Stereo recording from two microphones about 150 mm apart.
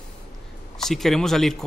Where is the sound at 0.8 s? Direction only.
Centre (ahead or behind).